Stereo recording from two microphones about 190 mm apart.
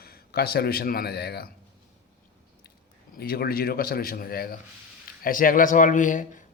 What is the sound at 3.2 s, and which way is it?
A man's voice, 55° left (ahead or behind).